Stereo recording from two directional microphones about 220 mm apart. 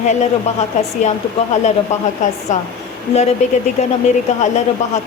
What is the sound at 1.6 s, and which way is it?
Speech, 30° left (ahead or behind).